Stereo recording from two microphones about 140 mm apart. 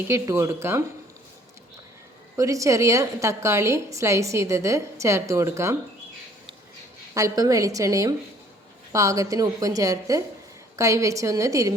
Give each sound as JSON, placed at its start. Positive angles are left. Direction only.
{"t": 0.1, "sound": "a woman's voice", "side_deg": -20}
{"t": 2.3, "sound": "a woman's voice", "side_deg": -25}
{"t": 7.1, "sound": "a woman's voice", "side_deg": -25}